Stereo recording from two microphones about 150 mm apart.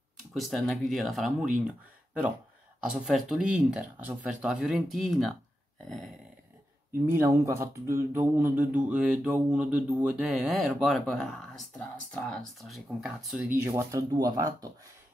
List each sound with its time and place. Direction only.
0.3 s speech: centre (ahead or behind)
2.8 s speech: 5° right (ahead or behind)
7.1 s speech: 20° right (ahead or behind); by 13.4 s centre (ahead or behind)
13.6 s speech: 15° right (ahead or behind)